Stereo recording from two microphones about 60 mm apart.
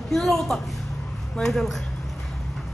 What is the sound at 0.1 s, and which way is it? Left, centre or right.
Speech, centre.